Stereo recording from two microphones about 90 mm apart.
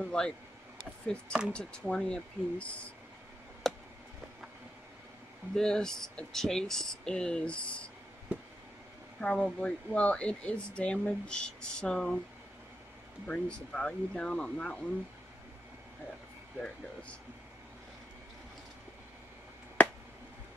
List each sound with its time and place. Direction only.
0.0 s speech: 10° left (ahead or behind)
3.6 s a sound: 5° left (ahead or behind)
5.5 s speech: 5° left (ahead or behind)
8.3 s a sound: 15° right (ahead or behind)
9.2 s speech: 10° left (ahead or behind)
13.3 s speech: 10° left (ahead or behind)